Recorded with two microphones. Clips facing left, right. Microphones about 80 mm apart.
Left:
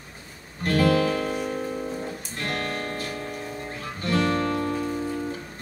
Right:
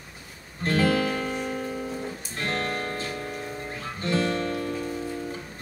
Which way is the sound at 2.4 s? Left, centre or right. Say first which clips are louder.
Right 1 dB; right.